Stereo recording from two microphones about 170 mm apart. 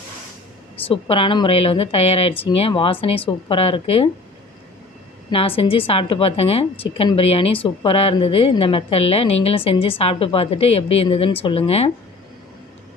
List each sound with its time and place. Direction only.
0.9 s a woman's voice: 30° left (ahead or behind)
5.3 s a woman's voice: 35° left (ahead or behind)